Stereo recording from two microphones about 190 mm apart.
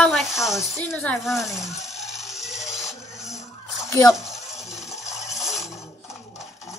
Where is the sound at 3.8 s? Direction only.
15° left (ahead or behind).